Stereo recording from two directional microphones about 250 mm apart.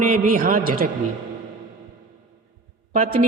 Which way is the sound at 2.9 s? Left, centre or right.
Right.